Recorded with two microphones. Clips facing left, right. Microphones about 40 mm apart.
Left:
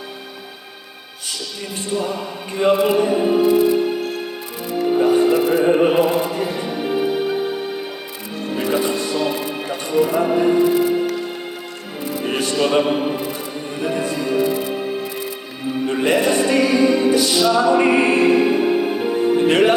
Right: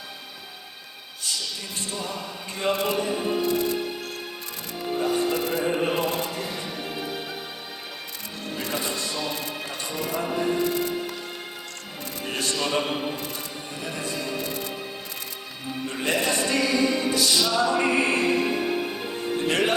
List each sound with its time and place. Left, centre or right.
2.0 s music: centre
4.8 s music: left
8.5 s music: left
12.0 s speech: left
13.7 s music: left
15.9 s music: left